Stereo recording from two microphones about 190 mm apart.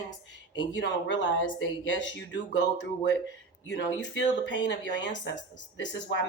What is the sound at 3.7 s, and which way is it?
Speech, 70° left (ahead or behind).